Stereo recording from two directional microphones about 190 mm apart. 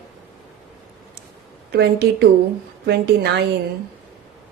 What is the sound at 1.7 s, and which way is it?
Speech, 55° right (ahead or behind).